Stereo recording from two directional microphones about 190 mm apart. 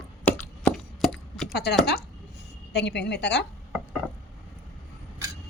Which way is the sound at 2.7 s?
65° left (ahead or behind).